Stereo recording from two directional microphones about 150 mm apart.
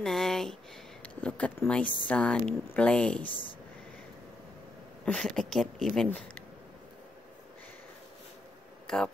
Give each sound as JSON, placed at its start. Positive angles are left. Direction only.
{"t": 0.0, "sound": "speech", "side_deg": 0}
{"t": 3.3, "sound": "speech", "side_deg": 35}
{"t": 5.0, "sound": "speech", "side_deg": 5}
{"t": 8.8, "sound": "speech", "side_deg": 5}